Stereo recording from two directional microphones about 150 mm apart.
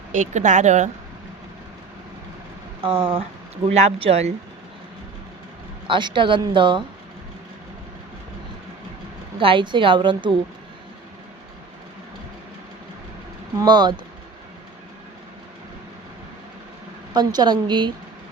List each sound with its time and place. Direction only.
0.1 s speech: 55° right (ahead or behind)
2.8 s a woman's voice: 35° right (ahead or behind)
3.7 s speech: 45° right (ahead or behind)
5.9 s a woman's voice: 30° right (ahead or behind)
9.4 s a woman's voice: 35° right (ahead or behind)
13.6 s a woman's voice: 30° right (ahead or behind)
17.2 s a woman's voice: 30° right (ahead or behind)